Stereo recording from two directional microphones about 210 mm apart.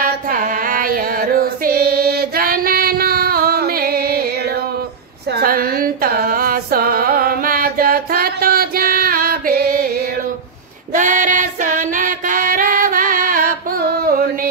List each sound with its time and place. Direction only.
0.0 s female singing: 40° right (ahead or behind)
5.4 s music: 45° right (ahead or behind)
11.0 s female singing: 35° right (ahead or behind)